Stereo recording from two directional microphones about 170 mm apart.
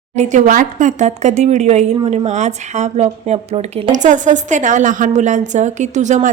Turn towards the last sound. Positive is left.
turn(degrees=-45)  # may be behind; listen again after turning